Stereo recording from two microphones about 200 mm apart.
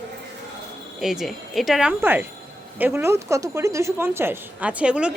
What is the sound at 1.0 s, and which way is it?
A woman's voice, centre (ahead or behind).